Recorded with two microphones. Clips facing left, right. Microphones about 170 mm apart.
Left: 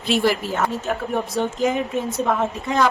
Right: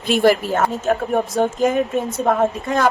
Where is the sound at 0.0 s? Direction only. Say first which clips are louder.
Right 4 dB; 50° right (ahead or behind).